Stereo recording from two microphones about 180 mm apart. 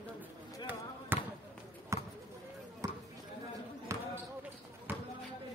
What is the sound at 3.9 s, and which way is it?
Basketball bounce, 15° right (ahead or behind).